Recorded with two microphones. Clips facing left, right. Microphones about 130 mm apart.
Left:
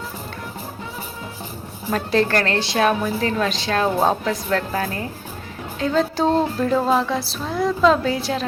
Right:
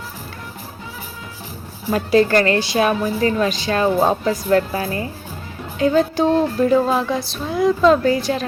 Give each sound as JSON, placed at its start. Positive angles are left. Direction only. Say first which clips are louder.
{"t": 1.9, "sound": "music", "louder": "right 4 dB", "side_deg": -5}
{"t": 4.5, "sound": "a woman's voice", "louder": "right 6 dB", "side_deg": -5}
{"t": 5.8, "sound": "music", "louder": "right 3 dB", "side_deg": 0}